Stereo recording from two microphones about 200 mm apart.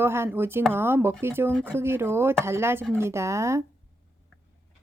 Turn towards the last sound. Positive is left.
turn(degrees=-15)  # may be behind; listen again after turning